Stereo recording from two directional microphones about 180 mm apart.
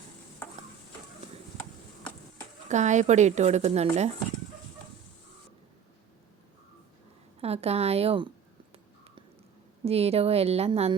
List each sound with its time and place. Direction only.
2.6 s a woman's voice: 40° right (ahead or behind)
7.4 s a woman's voice: 35° right (ahead or behind)
9.8 s a woman's voice: 35° right (ahead or behind)